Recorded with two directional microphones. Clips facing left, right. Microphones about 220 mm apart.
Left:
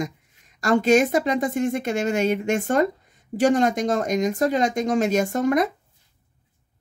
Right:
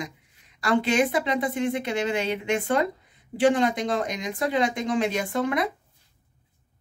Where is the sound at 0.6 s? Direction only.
45° left (ahead or behind).